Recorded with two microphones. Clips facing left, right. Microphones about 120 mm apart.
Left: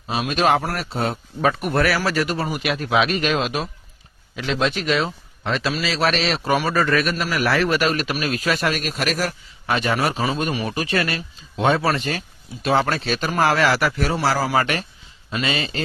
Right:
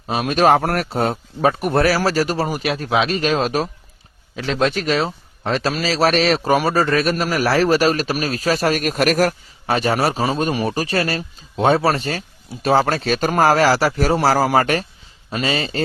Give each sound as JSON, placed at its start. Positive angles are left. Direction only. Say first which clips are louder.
{"t": 0.1, "sound": "speech", "louder": "right 4 dB", "side_deg": -45}
{"t": 8.8, "sound": "speech", "louder": "right 7 dB", "side_deg": -50}
{"t": 9.6, "sound": "speech", "louder": "right 3 dB", "side_deg": -35}